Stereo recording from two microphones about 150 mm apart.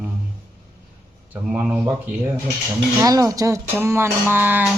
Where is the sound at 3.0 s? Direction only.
25° right (ahead or behind).